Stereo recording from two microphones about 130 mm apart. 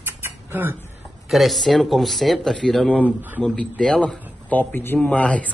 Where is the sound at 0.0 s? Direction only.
15° right (ahead or behind).